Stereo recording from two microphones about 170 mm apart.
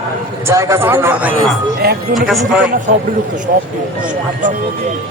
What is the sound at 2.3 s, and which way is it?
Speech, 5° right (ahead or behind).